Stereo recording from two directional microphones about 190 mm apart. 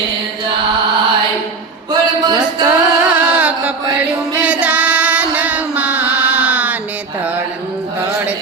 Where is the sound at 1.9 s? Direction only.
20° right (ahead or behind).